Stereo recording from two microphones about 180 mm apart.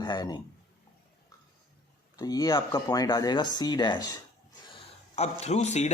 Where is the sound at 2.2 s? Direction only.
20° left (ahead or behind).